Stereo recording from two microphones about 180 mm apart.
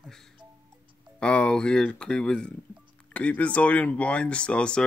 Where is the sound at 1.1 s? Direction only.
5° left (ahead or behind).